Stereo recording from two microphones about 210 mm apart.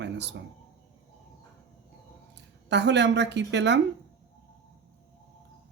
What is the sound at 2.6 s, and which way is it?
Speech, 55° right (ahead or behind).